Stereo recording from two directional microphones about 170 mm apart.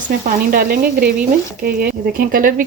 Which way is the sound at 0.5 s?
65° right (ahead or behind).